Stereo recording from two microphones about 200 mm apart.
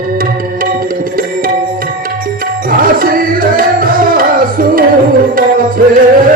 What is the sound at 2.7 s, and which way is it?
Tabla, 45° right (ahead or behind).